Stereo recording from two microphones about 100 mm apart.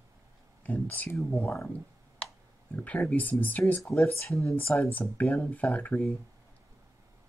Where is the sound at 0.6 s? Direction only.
15° left (ahead or behind).